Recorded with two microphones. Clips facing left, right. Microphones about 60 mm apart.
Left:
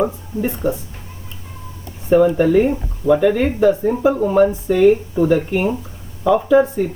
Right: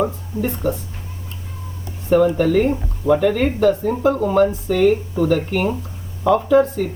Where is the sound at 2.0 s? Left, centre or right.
Centre.